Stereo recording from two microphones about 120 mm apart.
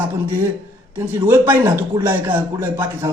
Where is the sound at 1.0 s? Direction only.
20° right (ahead or behind).